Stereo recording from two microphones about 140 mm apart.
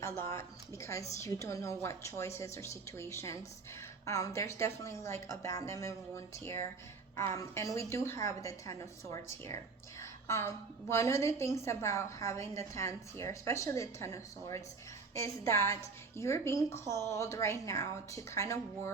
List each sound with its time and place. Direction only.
0.0 s a woman's voice: 20° left (ahead or behind)